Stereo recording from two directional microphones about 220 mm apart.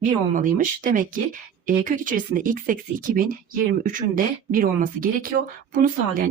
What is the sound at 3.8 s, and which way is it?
Speech, 40° right (ahead or behind).